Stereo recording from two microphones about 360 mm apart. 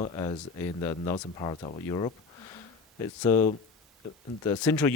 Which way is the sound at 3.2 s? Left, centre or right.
Centre.